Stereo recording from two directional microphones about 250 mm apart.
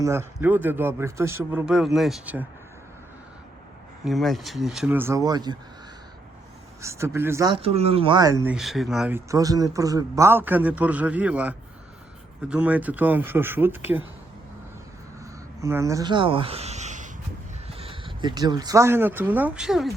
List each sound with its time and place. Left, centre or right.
0.0 s speech: centre
4.0 s speech: centre
6.8 s speech: centre
7.6 s speech: right; by 14.1 s centre
15.6 s speech: centre